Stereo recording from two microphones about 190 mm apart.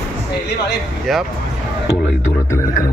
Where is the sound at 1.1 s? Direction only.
Centre (ahead or behind).